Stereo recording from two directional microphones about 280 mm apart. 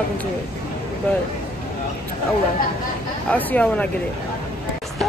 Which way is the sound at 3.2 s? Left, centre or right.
Centre.